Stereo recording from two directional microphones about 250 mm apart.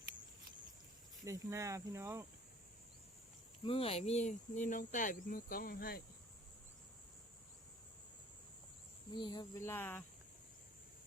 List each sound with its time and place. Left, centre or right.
1.2 s speech: centre
3.6 s speech: left
9.1 s speech: centre